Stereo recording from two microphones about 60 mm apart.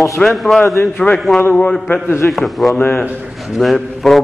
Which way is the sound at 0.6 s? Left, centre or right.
Left.